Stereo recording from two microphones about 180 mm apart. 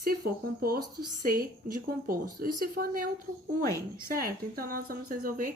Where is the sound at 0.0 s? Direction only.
60° right (ahead or behind).